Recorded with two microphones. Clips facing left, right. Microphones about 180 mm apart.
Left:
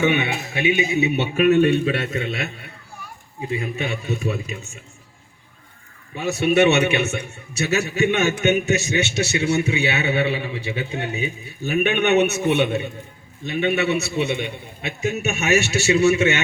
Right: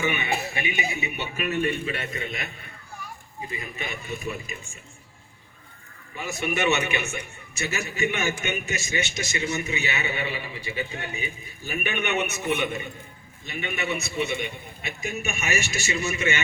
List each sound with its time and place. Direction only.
0.0 s a man's voice: 70° left (ahead or behind)
3.5 s a man's voice: 70° left (ahead or behind)
6.1 s a man's voice: 70° left (ahead or behind)